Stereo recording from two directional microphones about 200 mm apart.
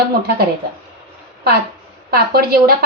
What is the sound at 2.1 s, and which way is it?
Speech, 50° right (ahead or behind).